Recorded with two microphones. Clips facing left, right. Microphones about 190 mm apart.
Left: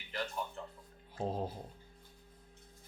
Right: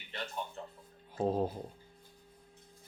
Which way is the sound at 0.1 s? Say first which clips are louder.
Left 2 dB; 25° right (ahead or behind).